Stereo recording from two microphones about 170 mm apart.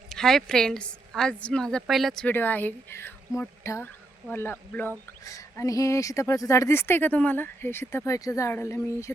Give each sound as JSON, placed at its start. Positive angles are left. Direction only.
{"t": 0.1, "sound": "a woman's voice", "side_deg": 5}